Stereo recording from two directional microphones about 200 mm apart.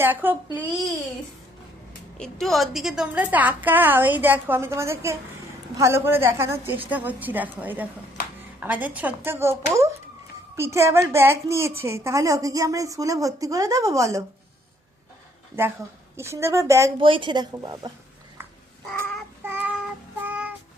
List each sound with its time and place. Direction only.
0.0 s a woman's voice: 10° right (ahead or behind)
2.1 s a woman's voice: centre (ahead or behind); by 14.3 s 15° right (ahead or behind)
16.1 s a woman's voice: 15° right (ahead or behind)
17.0 s a woman's voice: 25° right (ahead or behind)
19.4 s child singing: 10° right (ahead or behind)